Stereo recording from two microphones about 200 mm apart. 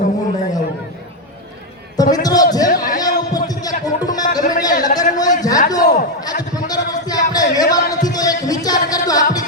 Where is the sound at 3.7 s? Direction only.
20° left (ahead or behind).